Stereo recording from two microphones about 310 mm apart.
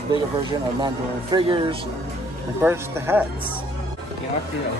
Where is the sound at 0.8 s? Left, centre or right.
Centre.